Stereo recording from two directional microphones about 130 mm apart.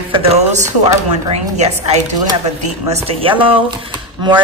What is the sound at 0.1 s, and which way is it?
A woman's voice, 50° right (ahead or behind).